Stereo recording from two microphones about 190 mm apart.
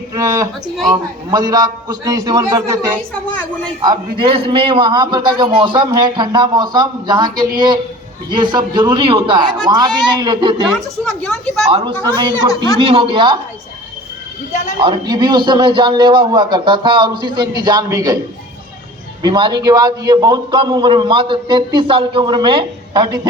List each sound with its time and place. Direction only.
0.1 s a man's voice: 15° right (ahead or behind)
10.8 s speech: 5° left (ahead or behind)
12.0 s a man's voice: 25° right (ahead or behind)
14.8 s a man's voice: 25° right (ahead or behind)
19.2 s a man's voice: 25° right (ahead or behind)